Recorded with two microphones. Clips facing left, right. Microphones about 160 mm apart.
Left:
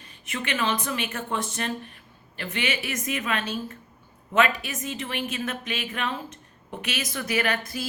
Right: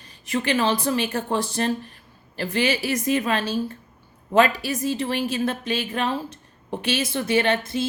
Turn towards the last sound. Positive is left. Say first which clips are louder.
# right 6 dB
turn(degrees=-25)  # may be behind; listen again after turning